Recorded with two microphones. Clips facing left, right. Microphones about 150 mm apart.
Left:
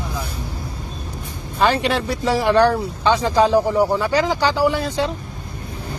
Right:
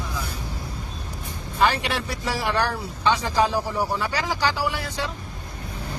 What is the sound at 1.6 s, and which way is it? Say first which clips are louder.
Speech: left 5 dB; 25° left (ahead or behind).